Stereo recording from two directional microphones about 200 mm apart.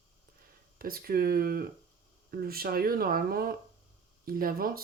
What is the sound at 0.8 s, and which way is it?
Speech, 50° right (ahead or behind).